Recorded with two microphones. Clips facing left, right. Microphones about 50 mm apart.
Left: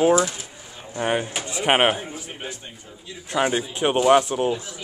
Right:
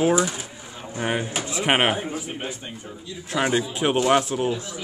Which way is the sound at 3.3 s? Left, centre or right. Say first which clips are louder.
Left 2 dB; centre.